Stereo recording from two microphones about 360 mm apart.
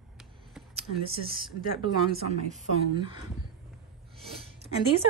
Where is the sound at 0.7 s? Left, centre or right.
Centre.